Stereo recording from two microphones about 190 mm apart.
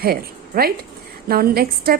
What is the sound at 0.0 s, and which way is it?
A woman's voice, 55° right (ahead or behind).